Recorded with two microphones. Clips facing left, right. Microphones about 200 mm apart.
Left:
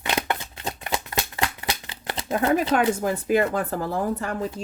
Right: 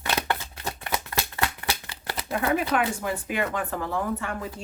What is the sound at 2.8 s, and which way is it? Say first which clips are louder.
Speech: left 5 dB; 40° left (ahead or behind).